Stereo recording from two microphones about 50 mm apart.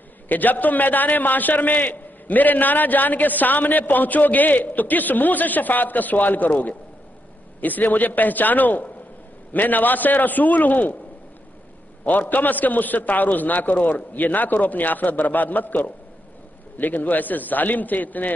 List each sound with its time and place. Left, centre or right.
0.3 s a man's voice: left
12.0 s a man's voice: left